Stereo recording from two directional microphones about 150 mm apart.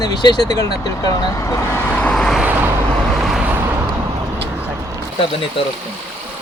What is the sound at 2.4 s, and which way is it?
Vehicle, 10° right (ahead or behind).